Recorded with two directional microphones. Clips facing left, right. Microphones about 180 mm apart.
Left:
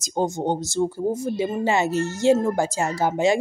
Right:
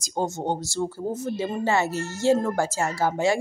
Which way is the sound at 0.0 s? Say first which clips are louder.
Left 3 dB; 15° left (ahead or behind).